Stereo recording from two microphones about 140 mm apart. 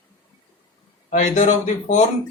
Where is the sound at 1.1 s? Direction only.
60° left (ahead or behind).